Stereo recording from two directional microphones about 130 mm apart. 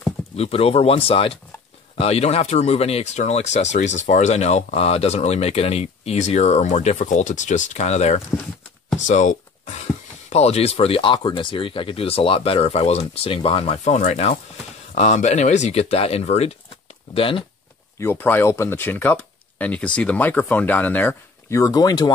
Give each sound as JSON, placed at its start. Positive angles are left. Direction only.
{"t": 0.4, "sound": "speech", "side_deg": 50}
{"t": 9.0, "sound": "a sound", "side_deg": 70}
{"t": 10.3, "sound": "speech", "side_deg": 55}
{"t": 17.9, "sound": "speech", "side_deg": 15}